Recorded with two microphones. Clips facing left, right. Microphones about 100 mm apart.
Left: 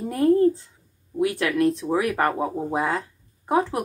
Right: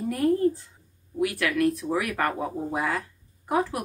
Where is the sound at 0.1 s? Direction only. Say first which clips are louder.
Left 5 dB; 30° left (ahead or behind).